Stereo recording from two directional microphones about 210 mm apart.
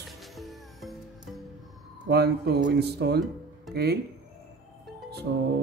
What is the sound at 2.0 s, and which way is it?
Speech, 50° right (ahead or behind).